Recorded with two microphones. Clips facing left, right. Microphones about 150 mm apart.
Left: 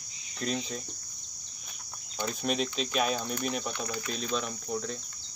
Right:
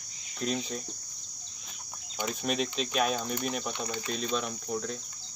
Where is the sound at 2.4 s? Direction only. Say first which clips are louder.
Left 1 dB; centre (ahead or behind).